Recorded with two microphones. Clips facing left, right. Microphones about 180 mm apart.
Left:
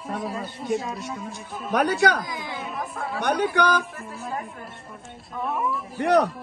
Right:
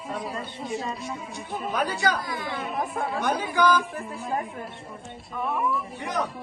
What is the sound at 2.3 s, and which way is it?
Speech, 20° left (ahead or behind).